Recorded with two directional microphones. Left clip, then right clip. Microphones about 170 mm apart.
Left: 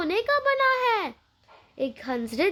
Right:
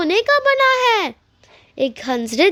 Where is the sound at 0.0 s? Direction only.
45° right (ahead or behind).